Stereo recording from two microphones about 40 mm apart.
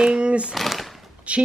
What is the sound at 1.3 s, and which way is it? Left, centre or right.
Speech, right.